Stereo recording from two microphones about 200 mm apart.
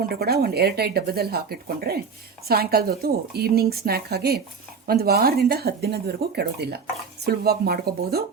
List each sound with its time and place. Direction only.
0.2 s speech: 50° right (ahead or behind)